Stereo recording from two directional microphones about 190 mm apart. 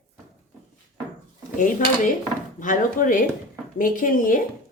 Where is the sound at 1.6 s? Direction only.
45° left (ahead or behind).